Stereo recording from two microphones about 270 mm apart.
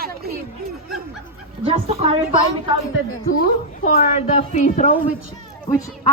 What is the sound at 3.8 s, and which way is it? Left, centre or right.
A woman's voice, left.